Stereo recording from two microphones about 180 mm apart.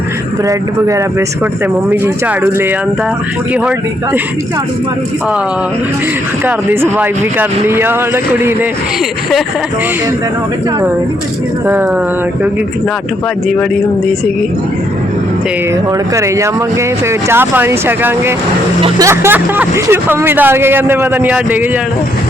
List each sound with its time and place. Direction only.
0.4 s speech: 15° right (ahead or behind)
6.4 s speech: 10° right (ahead or behind)
16.1 s speech: 15° right (ahead or behind)